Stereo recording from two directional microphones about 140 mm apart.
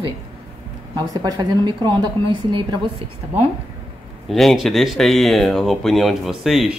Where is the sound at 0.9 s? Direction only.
30° right (ahead or behind).